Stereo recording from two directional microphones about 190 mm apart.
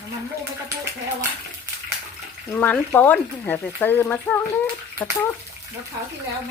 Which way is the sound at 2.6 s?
10° left (ahead or behind).